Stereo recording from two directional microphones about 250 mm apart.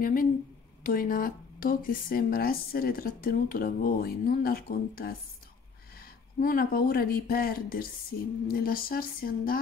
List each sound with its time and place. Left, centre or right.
0.0 s speech: left
6.4 s speech: left